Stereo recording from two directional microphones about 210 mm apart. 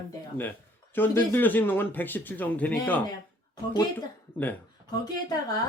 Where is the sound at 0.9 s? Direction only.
10° left (ahead or behind).